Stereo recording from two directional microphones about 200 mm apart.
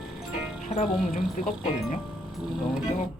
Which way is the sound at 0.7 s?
40° left (ahead or behind).